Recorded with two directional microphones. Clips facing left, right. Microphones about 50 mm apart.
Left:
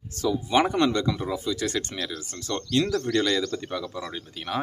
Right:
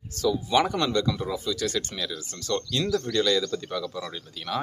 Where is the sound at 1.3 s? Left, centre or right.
Left.